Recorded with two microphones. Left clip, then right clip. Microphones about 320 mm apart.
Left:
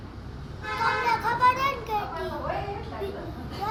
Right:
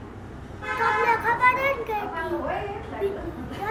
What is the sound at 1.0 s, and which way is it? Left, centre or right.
Children playing, centre.